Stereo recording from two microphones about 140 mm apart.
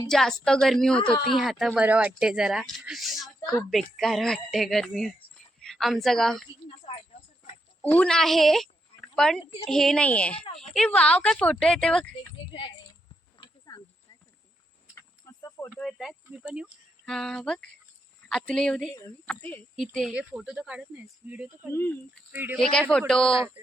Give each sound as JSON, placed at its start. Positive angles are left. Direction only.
{"t": 0.1, "sound": "speech", "side_deg": 5}
{"t": 1.0, "sound": "speech", "side_deg": 35}
{"t": 1.4, "sound": "speech", "side_deg": 0}
{"t": 6.7, "sound": "a sound", "side_deg": 40}
{"t": 7.8, "sound": "a woman's voice", "side_deg": 10}
{"t": 12.5, "sound": "speech", "side_deg": 35}
{"t": 13.4, "sound": "a sound", "side_deg": 30}
{"t": 15.4, "sound": "snake", "side_deg": 25}
{"t": 15.7, "sound": "a woman's voice", "side_deg": 0}
{"t": 19.7, "sound": "speech", "side_deg": 0}
{"t": 21.7, "sound": "a woman's voice", "side_deg": 15}
{"t": 22.3, "sound": "speech", "side_deg": -15}
{"t": 22.5, "sound": "speech", "side_deg": 5}